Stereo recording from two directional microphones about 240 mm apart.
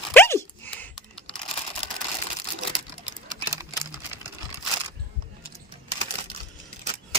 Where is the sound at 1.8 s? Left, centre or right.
Left.